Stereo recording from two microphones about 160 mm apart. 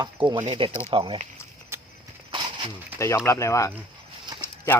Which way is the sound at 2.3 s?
30° right (ahead or behind).